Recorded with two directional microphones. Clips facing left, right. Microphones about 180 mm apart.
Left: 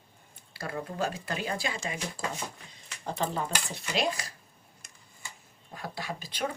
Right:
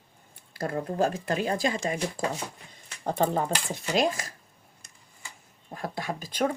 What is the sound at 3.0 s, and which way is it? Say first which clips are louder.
Speech: right 6 dB; 50° right (ahead or behind).